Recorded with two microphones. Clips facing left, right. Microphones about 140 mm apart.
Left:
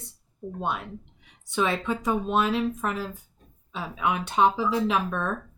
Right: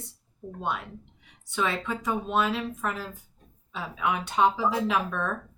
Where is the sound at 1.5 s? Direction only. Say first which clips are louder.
Left 3 dB; 20° left (ahead or behind).